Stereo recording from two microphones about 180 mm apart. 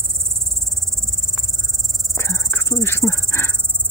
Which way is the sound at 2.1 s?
15° left (ahead or behind).